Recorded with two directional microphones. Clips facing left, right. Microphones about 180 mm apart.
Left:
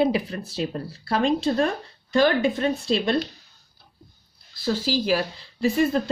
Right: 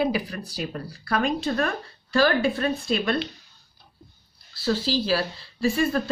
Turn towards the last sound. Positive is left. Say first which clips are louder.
# left 2 dB
turn(degrees=20)  # may be behind; listen again after turning